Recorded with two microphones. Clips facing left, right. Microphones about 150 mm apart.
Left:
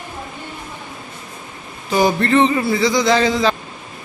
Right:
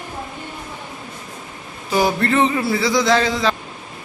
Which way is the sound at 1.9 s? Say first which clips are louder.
Left 2 dB; 5° right (ahead or behind).